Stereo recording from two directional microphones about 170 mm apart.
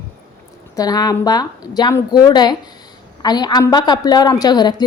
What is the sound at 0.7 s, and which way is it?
A woman's voice, 20° left (ahead or behind).